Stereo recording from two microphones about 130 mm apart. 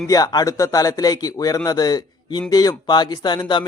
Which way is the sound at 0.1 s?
30° left (ahead or behind).